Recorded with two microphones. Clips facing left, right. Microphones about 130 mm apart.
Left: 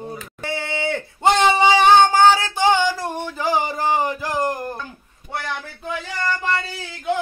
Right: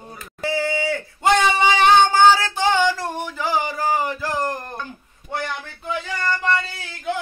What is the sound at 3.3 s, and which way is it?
Speech, 15° left (ahead or behind).